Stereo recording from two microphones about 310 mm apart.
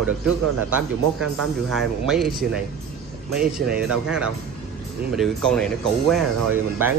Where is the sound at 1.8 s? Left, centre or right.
Centre.